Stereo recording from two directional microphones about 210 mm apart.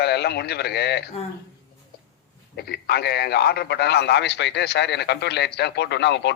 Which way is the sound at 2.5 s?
50° left (ahead or behind).